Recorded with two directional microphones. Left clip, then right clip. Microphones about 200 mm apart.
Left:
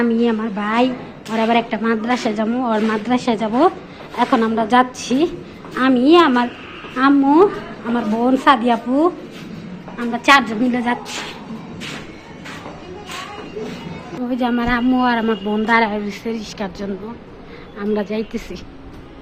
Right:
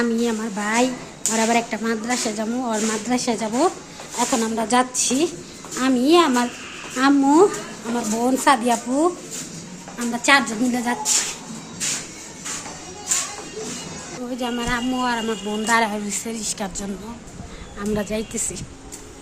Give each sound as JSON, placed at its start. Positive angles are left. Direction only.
{"t": 0.0, "sound": "speech", "side_deg": -15}
{"t": 10.1, "sound": "speech", "side_deg": -10}
{"t": 14.3, "sound": "speech", "side_deg": 0}
{"t": 17.7, "sound": "speech", "side_deg": -15}